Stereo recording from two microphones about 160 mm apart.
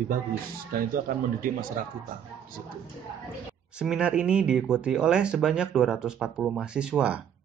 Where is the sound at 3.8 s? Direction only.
5° right (ahead or behind).